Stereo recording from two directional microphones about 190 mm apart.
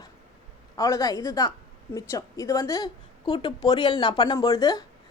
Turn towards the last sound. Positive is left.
turn(degrees=20)  # may be behind; listen again after turning